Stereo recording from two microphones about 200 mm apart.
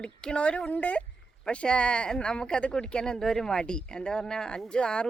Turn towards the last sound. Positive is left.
turn(degrees=5)  # may be behind; listen again after turning